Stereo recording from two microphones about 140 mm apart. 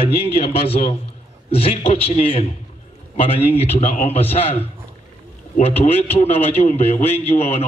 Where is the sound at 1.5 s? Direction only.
45° left (ahead or behind).